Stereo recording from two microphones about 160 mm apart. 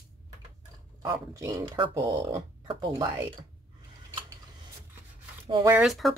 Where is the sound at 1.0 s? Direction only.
20° right (ahead or behind).